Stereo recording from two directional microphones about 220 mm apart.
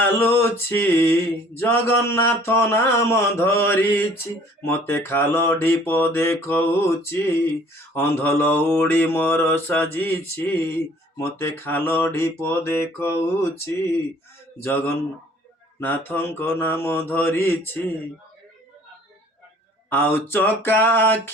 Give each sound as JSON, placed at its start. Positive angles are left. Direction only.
{"t": 0.0, "sound": "speech", "side_deg": 10}
{"t": 15.8, "sound": "speech", "side_deg": 10}
{"t": 19.9, "sound": "speech", "side_deg": 10}